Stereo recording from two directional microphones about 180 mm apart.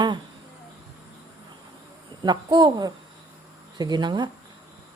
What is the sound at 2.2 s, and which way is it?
Speech, 25° right (ahead or behind).